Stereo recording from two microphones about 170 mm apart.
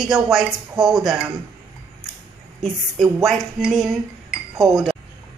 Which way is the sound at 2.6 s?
Centre (ahead or behind).